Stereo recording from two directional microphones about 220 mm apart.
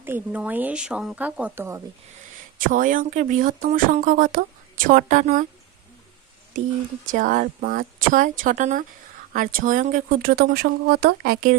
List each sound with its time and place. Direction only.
0.0 s speech: 10° right (ahead or behind)
2.6 s speech: 35° right (ahead or behind)
7.1 s speech: 40° right (ahead or behind)